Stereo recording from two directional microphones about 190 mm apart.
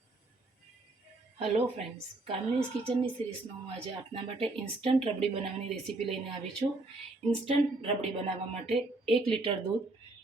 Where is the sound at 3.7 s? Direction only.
30° right (ahead or behind).